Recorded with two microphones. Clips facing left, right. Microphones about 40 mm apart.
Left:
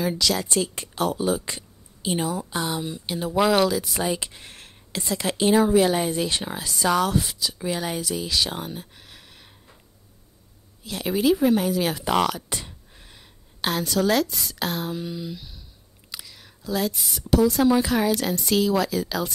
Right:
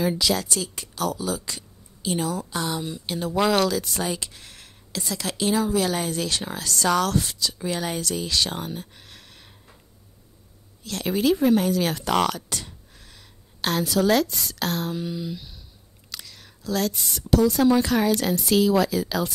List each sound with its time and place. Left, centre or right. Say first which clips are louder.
0.0 s a woman's voice: right 1 dB; centre
0.5 s speech: left 4 dB; left
2.0 s speech: even; centre
4.2 s speech: left 2 dB; left; by 9.8 s centre
10.8 s a woman's voice: even; centre
12.4 s a sound: left 1 dB; centre
13.7 s a woman's voice: right 1 dB; centre